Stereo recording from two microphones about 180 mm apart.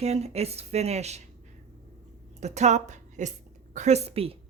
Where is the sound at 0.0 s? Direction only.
35° right (ahead or behind).